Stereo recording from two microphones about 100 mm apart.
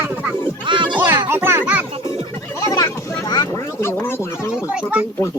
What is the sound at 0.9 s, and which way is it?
Music, 25° right (ahead or behind).